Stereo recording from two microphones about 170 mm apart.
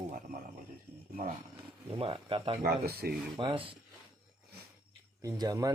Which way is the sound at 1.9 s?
30° right (ahead or behind).